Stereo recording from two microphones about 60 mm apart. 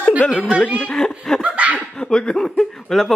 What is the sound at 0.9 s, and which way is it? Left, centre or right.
Laughter, centre.